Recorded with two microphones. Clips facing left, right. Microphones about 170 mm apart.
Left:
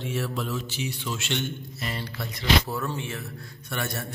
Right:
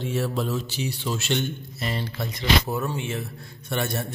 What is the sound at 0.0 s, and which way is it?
Mantra, 35° right (ahead or behind).